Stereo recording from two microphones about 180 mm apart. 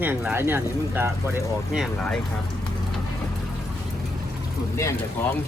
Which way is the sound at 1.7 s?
Centre (ahead or behind).